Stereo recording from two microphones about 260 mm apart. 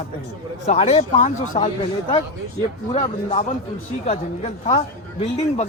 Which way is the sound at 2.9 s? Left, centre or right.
Left.